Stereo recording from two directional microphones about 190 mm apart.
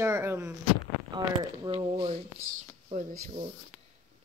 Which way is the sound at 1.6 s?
25° right (ahead or behind).